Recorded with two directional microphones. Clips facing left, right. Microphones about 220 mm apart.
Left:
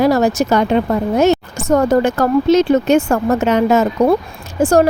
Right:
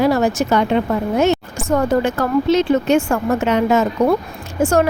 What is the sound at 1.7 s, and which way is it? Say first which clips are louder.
A woman's voice: left 4 dB; 40° left (ahead or behind).